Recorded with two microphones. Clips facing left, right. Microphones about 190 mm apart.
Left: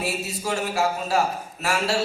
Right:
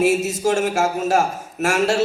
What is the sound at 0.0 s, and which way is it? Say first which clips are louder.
Speech: right 11 dB; 45° right (ahead or behind).